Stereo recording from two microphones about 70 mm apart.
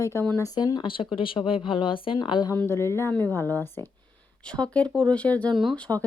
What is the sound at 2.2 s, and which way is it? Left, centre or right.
Speech, left.